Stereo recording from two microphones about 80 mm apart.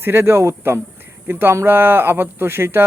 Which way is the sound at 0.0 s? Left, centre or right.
Right.